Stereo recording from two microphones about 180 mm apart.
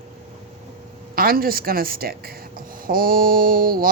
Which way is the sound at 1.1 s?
55° right (ahead or behind).